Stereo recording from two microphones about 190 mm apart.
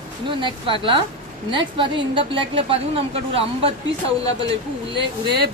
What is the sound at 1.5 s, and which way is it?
Speech, 25° right (ahead or behind).